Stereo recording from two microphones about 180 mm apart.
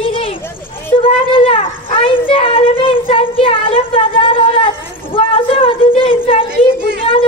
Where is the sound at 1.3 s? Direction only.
30° left (ahead or behind).